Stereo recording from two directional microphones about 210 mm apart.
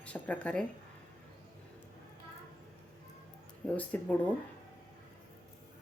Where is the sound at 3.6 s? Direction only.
5° left (ahead or behind).